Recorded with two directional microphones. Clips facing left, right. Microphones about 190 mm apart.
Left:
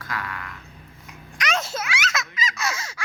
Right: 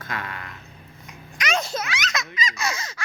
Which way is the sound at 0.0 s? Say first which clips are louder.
Even; 25° right (ahead or behind).